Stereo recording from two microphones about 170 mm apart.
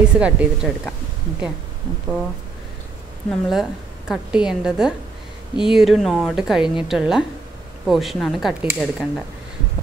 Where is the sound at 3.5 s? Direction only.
Centre (ahead or behind).